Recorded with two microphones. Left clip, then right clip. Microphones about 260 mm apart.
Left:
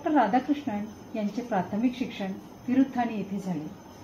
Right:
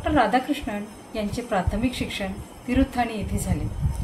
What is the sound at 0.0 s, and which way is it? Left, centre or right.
A woman's voice, right.